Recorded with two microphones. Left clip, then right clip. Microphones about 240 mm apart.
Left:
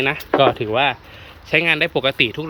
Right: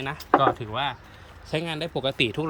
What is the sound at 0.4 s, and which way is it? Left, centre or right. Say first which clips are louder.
Speech: left 8 dB; centre.